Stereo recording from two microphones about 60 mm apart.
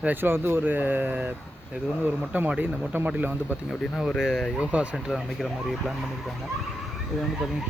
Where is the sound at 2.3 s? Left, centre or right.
Right.